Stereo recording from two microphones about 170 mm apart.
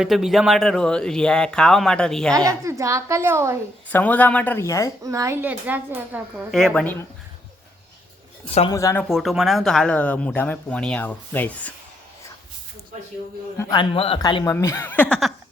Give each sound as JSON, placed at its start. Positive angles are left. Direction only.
{"t": 0.0, "sound": "speech", "side_deg": 0}
{"t": 2.3, "sound": "a woman's voice", "side_deg": -20}
{"t": 3.8, "sound": "speech", "side_deg": 10}
{"t": 5.0, "sound": "a woman's voice", "side_deg": -20}
{"t": 6.5, "sound": "speech", "side_deg": 0}
{"t": 8.4, "sound": "speech", "side_deg": 35}
{"t": 8.7, "sound": "a man's voice", "side_deg": 20}
{"t": 9.0, "sound": "speech", "side_deg": 0}
{"t": 13.6, "sound": "a man's voice", "side_deg": 20}
{"t": 13.9, "sound": "speech", "side_deg": 35}
{"t": 14.2, "sound": "a man's voice", "side_deg": 25}